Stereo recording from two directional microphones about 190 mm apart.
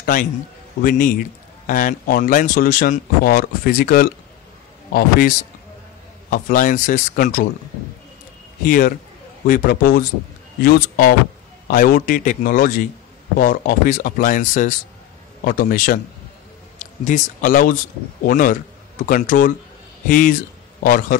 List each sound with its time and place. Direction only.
0.0 s a man's voice: 45° left (ahead or behind)
6.3 s speech: 45° left (ahead or behind)
8.6 s a man's voice: 50° left (ahead or behind)